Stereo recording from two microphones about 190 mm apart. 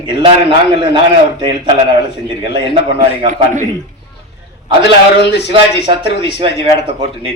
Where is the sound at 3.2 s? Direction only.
40° right (ahead or behind).